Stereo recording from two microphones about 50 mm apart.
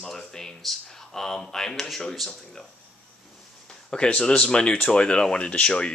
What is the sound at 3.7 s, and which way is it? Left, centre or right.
Speech, centre.